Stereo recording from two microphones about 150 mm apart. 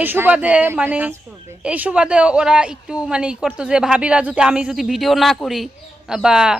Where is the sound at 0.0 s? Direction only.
10° right (ahead or behind).